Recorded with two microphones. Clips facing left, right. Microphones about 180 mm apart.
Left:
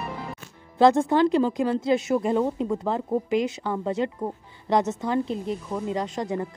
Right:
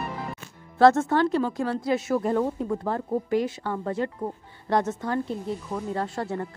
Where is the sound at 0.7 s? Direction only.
15° left (ahead or behind).